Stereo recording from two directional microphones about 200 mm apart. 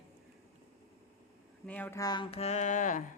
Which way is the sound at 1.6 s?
10° left (ahead or behind).